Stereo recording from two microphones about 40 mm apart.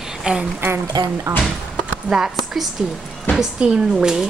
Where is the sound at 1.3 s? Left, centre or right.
Right.